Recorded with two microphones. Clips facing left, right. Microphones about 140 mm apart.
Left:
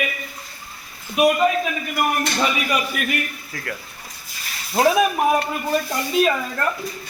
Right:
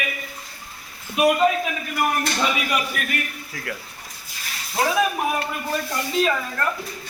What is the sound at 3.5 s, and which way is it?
Speech, 10° right (ahead or behind).